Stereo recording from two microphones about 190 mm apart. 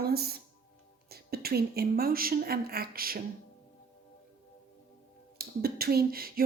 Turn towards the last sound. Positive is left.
turn(degrees=-50)  # may be behind; listen again after turning